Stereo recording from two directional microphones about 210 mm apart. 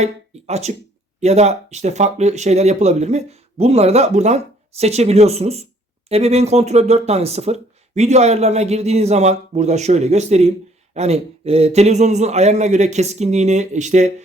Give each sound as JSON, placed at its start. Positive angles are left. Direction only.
{"t": 0.0, "sound": "speech", "side_deg": -30}